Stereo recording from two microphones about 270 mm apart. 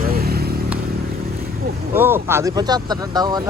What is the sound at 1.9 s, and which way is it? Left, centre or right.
Speech, centre.